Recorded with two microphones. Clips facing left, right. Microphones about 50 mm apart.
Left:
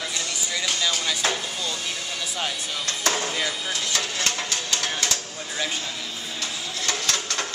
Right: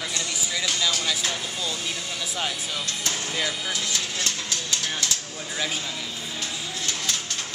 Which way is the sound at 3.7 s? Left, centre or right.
Left.